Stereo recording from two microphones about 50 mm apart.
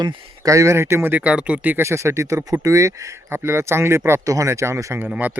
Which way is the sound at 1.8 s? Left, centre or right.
Right.